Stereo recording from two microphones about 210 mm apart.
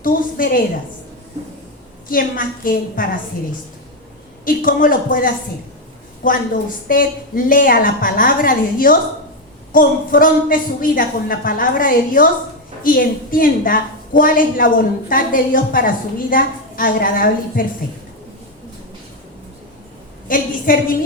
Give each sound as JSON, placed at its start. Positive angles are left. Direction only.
{"t": 0.0, "sound": "a woman's voice", "side_deg": 40}
{"t": 2.0, "sound": "a woman's voice", "side_deg": 40}
{"t": 4.4, "sound": "a woman's voice", "side_deg": 40}
{"t": 20.2, "sound": "a woman's voice", "side_deg": 40}